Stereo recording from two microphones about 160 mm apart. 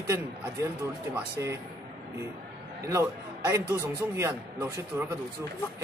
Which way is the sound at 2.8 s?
20° right (ahead or behind).